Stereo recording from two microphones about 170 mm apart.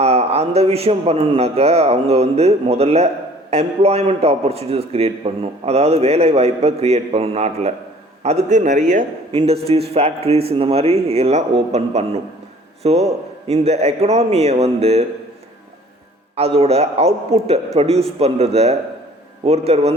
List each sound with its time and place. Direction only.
0.0 s a man's voice: 35° right (ahead or behind)
16.3 s a man's voice: 35° right (ahead or behind)